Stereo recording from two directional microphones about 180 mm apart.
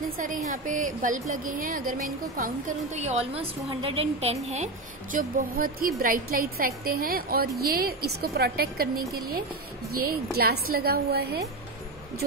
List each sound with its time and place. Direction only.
0.5 s a woman's voice: 45° right (ahead or behind)
3.0 s a woman's voice: 35° right (ahead or behind)
5.1 s a woman's voice: 50° right (ahead or behind)